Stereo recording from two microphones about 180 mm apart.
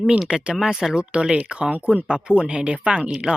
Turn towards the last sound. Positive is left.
turn(degrees=-5)  # may be behind; listen again after turning